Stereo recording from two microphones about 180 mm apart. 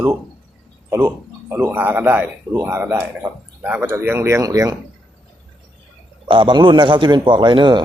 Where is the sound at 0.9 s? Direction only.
15° right (ahead or behind).